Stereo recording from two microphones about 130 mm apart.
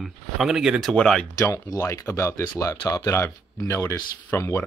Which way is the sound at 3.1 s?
20° left (ahead or behind).